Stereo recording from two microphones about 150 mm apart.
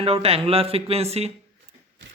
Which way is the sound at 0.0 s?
40° right (ahead or behind).